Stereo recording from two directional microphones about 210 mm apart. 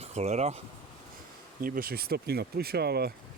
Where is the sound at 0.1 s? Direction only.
30° right (ahead or behind).